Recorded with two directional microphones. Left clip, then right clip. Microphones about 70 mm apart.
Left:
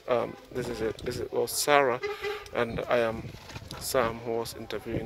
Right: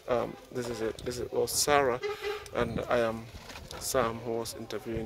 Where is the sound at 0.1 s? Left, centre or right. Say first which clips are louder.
Left 2 dB; centre.